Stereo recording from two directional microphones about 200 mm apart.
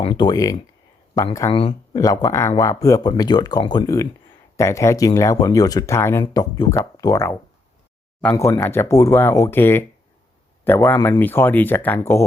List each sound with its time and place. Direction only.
0.0 s speech: 20° left (ahead or behind)
1.5 s speech: 30° left (ahead or behind); by 12.2 s 10° left (ahead or behind)